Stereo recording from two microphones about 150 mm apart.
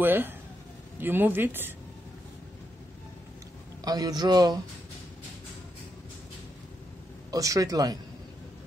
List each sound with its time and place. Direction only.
0.0 s speech: 15° right (ahead or behind)
3.8 s a man's voice: 25° right (ahead or behind)
7.2 s a man's voice: 20° right (ahead or behind)